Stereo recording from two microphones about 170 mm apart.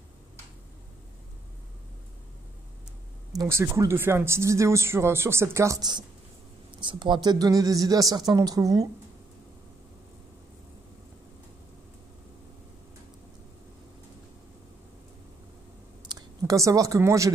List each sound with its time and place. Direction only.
3.3 s a woman's voice: 15° right (ahead or behind)
16.1 s a woman's voice: 20° right (ahead or behind)